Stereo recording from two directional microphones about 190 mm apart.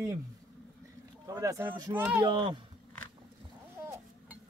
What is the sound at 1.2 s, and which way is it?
Speech, 15° right (ahead or behind).